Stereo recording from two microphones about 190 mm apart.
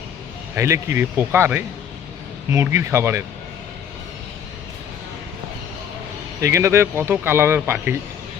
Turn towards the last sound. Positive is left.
turn(degrees=-10)  # may be behind; listen again after turning